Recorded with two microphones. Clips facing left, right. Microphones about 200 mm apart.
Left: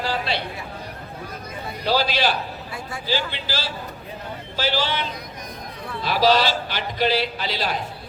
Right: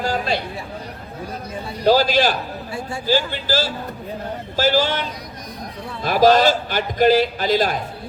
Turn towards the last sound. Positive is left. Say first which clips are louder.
# right 7 dB
turn(degrees=-45)  # may be behind; listen again after turning